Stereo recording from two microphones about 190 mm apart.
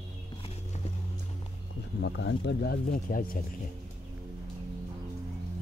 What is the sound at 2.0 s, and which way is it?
Speech, 70° left (ahead or behind).